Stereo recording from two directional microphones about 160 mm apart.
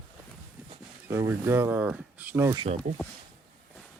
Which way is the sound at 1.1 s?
15° right (ahead or behind).